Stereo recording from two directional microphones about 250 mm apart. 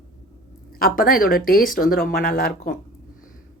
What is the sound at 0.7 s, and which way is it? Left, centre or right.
Speech, left.